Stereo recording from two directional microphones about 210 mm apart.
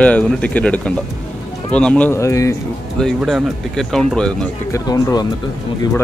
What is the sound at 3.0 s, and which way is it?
Speech, centre (ahead or behind).